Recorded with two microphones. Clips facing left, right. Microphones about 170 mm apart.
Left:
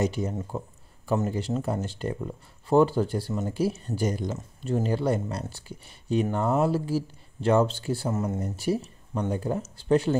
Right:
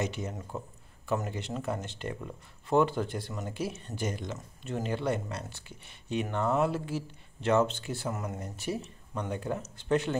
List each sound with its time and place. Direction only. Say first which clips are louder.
0.0 s speech: left 7 dB; 35° left (ahead or behind)